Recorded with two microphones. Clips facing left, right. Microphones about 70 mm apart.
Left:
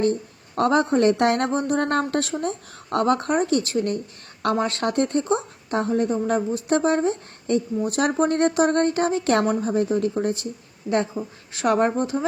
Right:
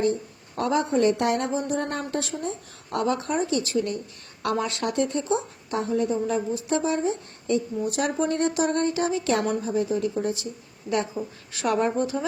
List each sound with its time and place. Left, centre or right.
0.0 s a woman's voice: left
10.9 s a woman's voice: left